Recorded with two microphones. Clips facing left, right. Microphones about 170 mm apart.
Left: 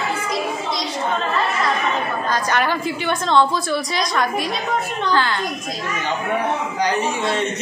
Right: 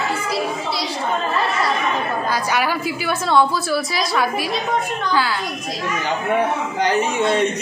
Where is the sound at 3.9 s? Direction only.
5° right (ahead or behind).